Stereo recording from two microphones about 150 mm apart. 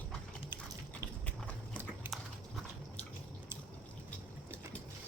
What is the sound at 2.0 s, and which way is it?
Dog, 15° right (ahead or behind).